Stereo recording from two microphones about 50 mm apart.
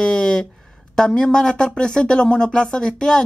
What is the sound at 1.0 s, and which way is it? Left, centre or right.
Speech, centre.